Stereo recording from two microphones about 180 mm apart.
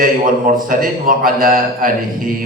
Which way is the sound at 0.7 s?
50° right (ahead or behind).